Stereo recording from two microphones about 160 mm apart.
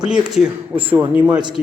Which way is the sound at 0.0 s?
5° right (ahead or behind).